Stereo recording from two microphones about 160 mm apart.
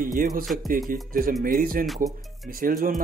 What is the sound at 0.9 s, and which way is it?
Speech, 60° right (ahead or behind).